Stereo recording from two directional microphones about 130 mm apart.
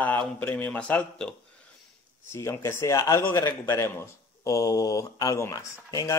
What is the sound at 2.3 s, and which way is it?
A man's voice, 20° left (ahead or behind).